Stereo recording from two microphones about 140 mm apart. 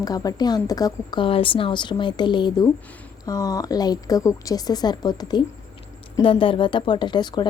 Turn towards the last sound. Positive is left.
turn(degrees=30)  # may be behind; listen again after turning